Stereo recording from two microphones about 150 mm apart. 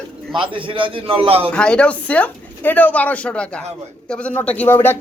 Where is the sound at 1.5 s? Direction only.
5° left (ahead or behind).